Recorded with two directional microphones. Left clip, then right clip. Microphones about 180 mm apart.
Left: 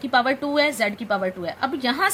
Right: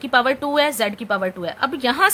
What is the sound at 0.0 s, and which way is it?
A woman's voice, 30° right (ahead or behind).